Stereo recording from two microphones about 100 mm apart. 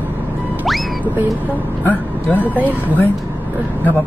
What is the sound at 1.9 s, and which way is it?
Speech, 20° left (ahead or behind).